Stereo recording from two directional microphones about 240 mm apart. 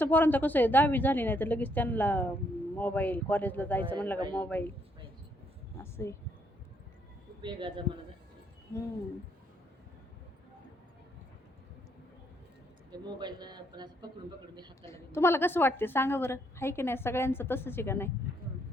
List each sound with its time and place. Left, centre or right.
0.0 s a woman's voice: centre
5.8 s a sound: centre
7.4 s speech: centre
12.9 s a man's voice: centre
14.8 s a woman's voice: centre